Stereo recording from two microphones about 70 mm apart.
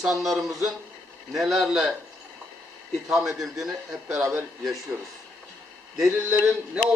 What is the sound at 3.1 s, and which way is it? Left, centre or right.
A man's voice, centre.